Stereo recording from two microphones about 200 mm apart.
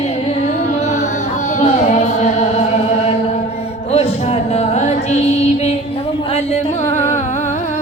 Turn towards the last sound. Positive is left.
turn(degrees=35)  # may be behind; listen again after turning